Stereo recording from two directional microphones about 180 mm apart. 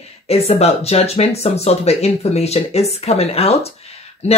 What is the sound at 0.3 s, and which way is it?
Speech, 35° left (ahead or behind).